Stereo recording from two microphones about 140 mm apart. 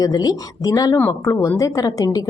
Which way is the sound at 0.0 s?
30° left (ahead or behind).